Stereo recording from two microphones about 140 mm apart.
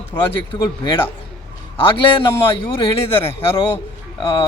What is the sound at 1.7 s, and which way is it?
Speech, 35° left (ahead or behind).